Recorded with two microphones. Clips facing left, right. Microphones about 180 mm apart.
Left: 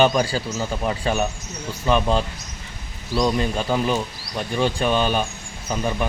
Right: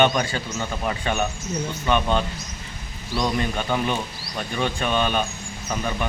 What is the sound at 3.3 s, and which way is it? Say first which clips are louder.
Speech: left 2 dB; 30° left (ahead or behind).